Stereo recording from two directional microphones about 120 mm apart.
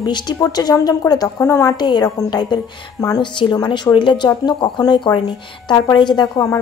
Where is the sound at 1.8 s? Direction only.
35° left (ahead or behind).